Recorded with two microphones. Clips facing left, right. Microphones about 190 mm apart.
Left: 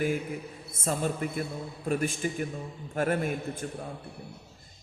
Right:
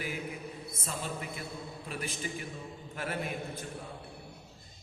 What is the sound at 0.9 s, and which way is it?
Mantra, 50° left (ahead or behind).